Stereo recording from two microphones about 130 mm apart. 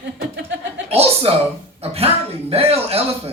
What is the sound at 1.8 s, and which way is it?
A woman's voice, 50° right (ahead or behind).